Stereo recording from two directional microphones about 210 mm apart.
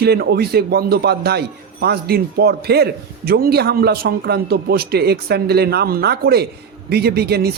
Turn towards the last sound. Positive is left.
turn(degrees=-50)  # may be behind; listen again after turning